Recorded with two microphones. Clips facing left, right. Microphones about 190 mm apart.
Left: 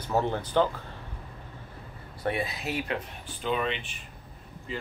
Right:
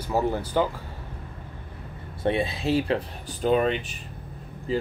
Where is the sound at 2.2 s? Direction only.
25° right (ahead or behind).